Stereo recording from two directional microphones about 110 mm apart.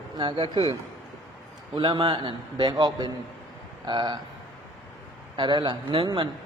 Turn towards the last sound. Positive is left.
turn(degrees=-50)  # may be behind; listen again after turning